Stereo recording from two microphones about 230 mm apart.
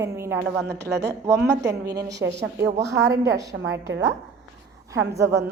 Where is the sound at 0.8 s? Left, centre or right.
Right.